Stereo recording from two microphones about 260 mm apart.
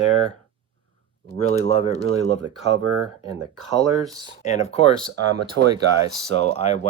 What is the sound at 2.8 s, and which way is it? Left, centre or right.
Speech, right.